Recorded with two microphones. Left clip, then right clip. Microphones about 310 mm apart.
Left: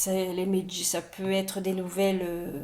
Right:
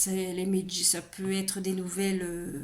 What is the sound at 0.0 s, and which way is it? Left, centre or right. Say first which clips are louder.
Speech: left 4 dB; centre.